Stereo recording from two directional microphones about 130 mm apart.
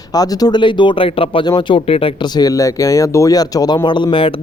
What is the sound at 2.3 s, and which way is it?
A man's voice, 25° left (ahead or behind).